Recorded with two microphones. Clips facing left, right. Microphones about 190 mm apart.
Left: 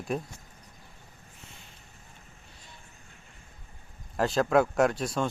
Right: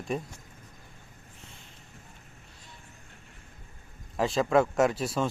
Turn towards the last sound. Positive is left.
turn(degrees=0)  # may be behind; listen again after turning